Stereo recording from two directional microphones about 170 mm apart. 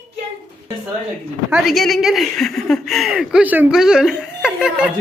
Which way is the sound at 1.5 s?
Centre (ahead or behind).